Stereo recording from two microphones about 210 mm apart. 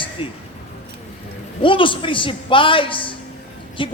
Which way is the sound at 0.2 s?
25° left (ahead or behind).